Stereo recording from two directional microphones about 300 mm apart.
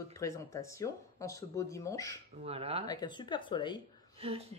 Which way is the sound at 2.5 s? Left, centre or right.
Centre.